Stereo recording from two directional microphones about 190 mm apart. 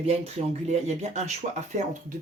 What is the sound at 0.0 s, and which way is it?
Speech, 35° right (ahead or behind).